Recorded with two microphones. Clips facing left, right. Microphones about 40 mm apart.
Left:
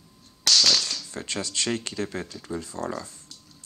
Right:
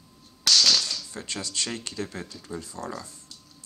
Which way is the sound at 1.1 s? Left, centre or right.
Left.